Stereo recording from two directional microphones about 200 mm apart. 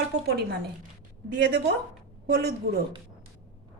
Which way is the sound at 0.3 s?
55° right (ahead or behind).